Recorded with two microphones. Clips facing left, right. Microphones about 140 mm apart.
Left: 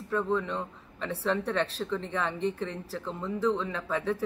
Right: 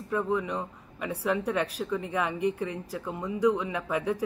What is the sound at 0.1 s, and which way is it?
Speech, 15° right (ahead or behind).